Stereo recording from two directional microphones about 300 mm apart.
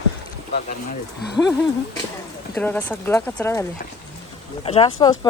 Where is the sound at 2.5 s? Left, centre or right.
Centre.